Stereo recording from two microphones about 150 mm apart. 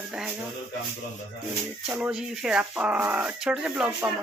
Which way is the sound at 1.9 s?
5° right (ahead or behind).